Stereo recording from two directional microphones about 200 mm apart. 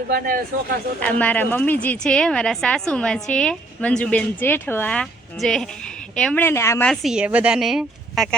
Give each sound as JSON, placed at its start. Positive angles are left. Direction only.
{"t": 0.1, "sound": "speech", "side_deg": -45}
{"t": 0.9, "sound": "a woman's voice", "side_deg": 5}